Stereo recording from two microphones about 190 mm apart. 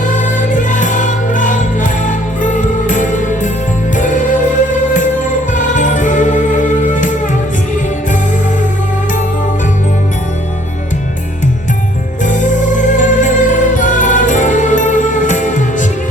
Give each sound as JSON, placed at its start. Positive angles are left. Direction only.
{"t": 0.0, "sound": "music", "side_deg": 40}
{"t": 12.2, "sound": "music", "side_deg": 40}